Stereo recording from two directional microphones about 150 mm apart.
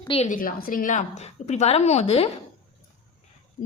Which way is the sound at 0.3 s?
70° left (ahead or behind).